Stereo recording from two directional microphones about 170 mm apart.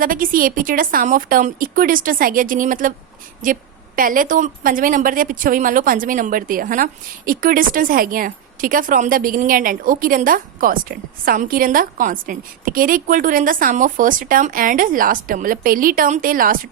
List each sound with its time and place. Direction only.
0.0 s a woman's voice: 55° right (ahead or behind)